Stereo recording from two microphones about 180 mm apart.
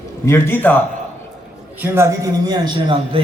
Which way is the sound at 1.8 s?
15° right (ahead or behind).